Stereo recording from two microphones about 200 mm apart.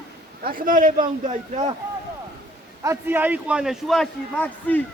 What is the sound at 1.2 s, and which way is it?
Speech, 30° right (ahead or behind).